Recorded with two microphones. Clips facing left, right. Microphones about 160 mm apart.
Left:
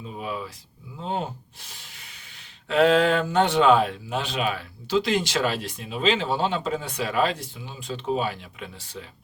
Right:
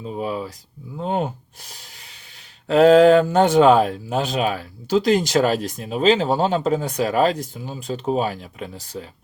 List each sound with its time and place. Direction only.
0.0 s speech: 40° right (ahead or behind)
0.9 s speech: 55° right (ahead or behind)
2.6 s speech: 40° right (ahead or behind)